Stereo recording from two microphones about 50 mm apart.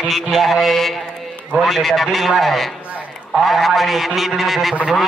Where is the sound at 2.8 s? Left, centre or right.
Right.